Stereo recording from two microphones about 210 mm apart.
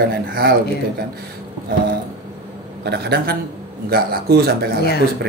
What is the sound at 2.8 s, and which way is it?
Speech, 50° right (ahead or behind).